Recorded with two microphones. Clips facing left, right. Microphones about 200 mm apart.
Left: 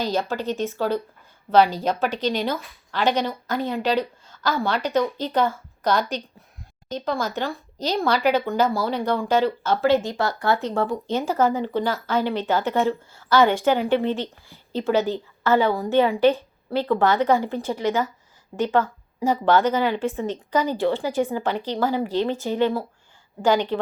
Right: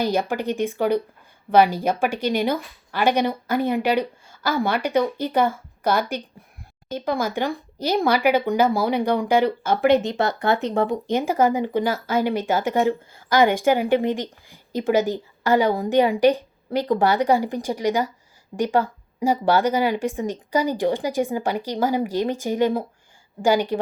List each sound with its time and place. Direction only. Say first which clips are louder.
0.0 s speech: right 2 dB; 15° right (ahead or behind)